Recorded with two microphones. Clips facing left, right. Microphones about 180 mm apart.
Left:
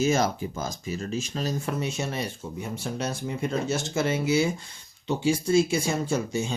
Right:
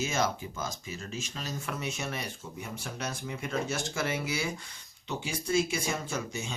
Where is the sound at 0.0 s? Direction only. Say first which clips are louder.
Left 7 dB; 40° left (ahead or behind).